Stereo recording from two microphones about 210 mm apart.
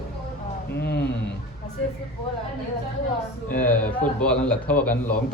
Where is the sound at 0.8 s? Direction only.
50° left (ahead or behind).